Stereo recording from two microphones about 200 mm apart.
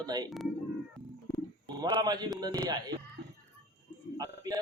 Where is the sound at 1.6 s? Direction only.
20° right (ahead or behind).